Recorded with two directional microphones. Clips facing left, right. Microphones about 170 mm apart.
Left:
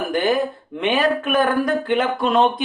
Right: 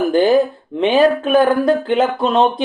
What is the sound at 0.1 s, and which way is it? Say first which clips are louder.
Speech: right 5 dB; 30° right (ahead or behind).